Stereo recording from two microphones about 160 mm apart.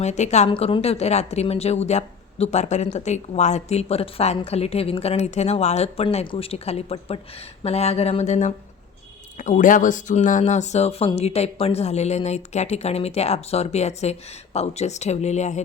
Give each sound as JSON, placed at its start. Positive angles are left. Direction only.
{"t": 0.0, "sound": "speech", "side_deg": 45}